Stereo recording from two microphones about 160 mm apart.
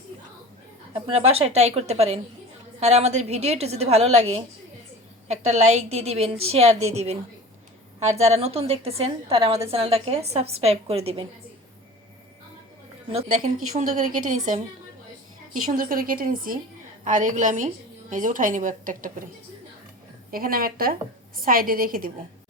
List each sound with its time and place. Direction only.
1.0 s a woman's voice: 40° right (ahead or behind)
13.2 s a woman's voice: 60° right (ahead or behind)
15.6 s a woman's voice: 60° right (ahead or behind)
20.3 s a woman's voice: 65° right (ahead or behind)